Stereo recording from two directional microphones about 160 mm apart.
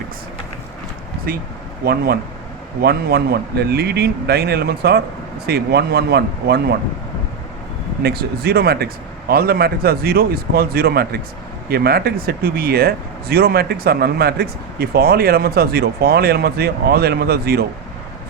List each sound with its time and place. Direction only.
1.3 s speech: 70° right (ahead or behind); by 6.7 s 90° right
8.0 s speech: 75° right (ahead or behind)